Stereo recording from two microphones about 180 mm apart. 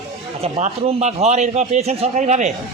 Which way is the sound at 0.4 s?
35° right (ahead or behind).